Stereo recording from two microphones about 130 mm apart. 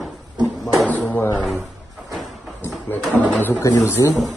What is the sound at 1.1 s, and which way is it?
Speech, 10° left (ahead or behind).